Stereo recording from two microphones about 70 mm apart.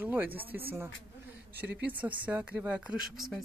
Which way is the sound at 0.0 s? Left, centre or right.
Right.